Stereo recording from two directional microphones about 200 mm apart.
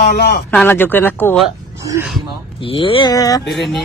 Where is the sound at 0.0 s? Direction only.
55° left (ahead or behind).